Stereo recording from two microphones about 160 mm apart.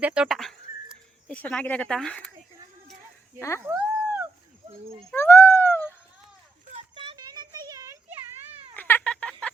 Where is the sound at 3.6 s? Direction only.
10° right (ahead or behind).